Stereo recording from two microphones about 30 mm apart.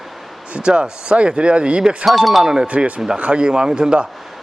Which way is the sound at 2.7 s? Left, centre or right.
Right.